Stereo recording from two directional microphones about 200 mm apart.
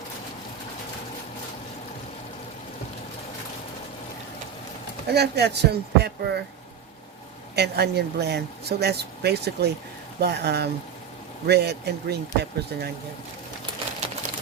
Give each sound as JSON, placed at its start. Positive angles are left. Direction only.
{"t": 5.0, "sound": "speech", "side_deg": -55}
{"t": 7.5, "sound": "speech", "side_deg": -55}